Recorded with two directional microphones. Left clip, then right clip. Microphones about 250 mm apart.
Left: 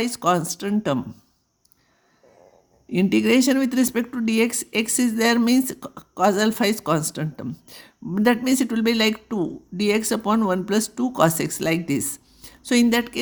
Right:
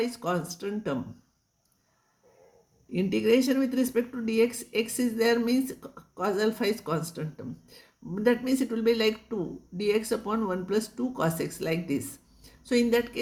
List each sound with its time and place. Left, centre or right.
0.0 s speech: left
2.9 s speech: left